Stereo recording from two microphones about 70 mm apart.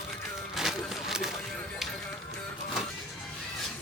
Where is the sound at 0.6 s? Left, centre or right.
Centre.